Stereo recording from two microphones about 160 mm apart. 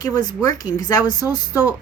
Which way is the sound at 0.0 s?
25° left (ahead or behind).